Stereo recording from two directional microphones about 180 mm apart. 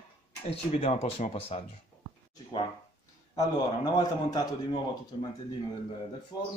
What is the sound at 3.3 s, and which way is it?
A man's voice, 20° left (ahead or behind).